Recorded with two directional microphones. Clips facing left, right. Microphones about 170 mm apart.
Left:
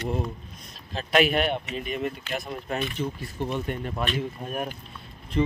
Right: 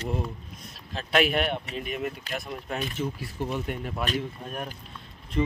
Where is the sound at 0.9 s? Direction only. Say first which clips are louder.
Left 2 dB; centre (ahead or behind).